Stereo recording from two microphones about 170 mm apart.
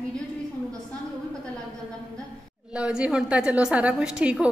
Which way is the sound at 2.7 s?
5° right (ahead or behind).